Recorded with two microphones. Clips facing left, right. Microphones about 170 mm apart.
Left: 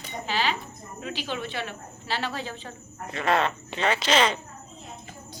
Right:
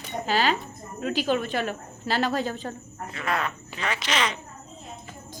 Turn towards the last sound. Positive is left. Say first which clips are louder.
# left 5 dB
turn(degrees=30)  # may be behind; listen again after turning